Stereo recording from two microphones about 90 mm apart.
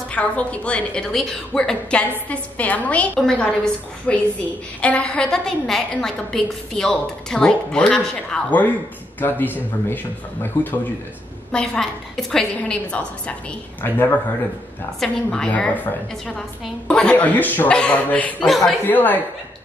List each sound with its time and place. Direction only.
0.1 s a woman's voice: 15° left (ahead or behind)
8.5 s a woman's voice: 20° left (ahead or behind)
11.5 s a woman's voice: 10° left (ahead or behind)
13.8 s speech: 20° left (ahead or behind)
15.0 s a woman's voice: 10° left (ahead or behind)
18.5 s speech: centre (ahead or behind)
18.9 s speech: 20° left (ahead or behind)